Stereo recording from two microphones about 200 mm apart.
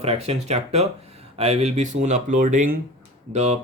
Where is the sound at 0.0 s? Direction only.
30° right (ahead or behind).